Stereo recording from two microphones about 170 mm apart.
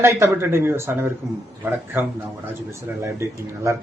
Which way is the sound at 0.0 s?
15° right (ahead or behind).